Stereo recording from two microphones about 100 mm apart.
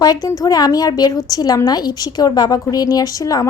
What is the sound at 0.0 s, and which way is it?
Speech, 40° left (ahead or behind).